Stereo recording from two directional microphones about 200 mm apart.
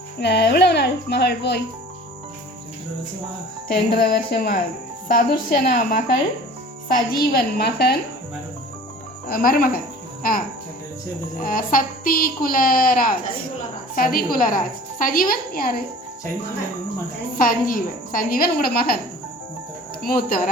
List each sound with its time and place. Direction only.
0.2 s speech: 55° left (ahead or behind)
3.7 s speech: 50° left (ahead or behind)
9.3 s speech: 45° left (ahead or behind)
11.3 s speech: 45° left (ahead or behind)
17.3 s speech: 45° left (ahead or behind)
20.0 s speech: 45° left (ahead or behind)